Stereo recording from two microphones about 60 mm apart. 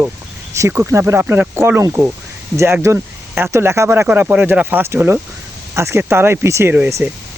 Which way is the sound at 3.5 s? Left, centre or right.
Right.